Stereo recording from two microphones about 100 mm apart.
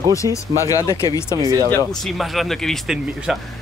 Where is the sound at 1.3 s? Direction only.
45° left (ahead or behind).